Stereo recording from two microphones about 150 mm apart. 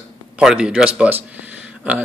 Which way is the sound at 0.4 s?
5° right (ahead or behind).